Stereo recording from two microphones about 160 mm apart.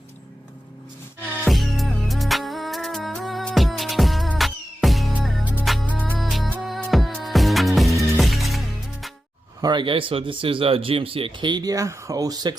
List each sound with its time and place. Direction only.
1.5 s music: centre (ahead or behind)
9.6 s speech: 25° right (ahead or behind)